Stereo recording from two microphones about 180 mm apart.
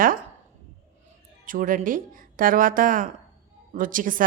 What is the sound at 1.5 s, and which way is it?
A woman's voice, 50° right (ahead or behind).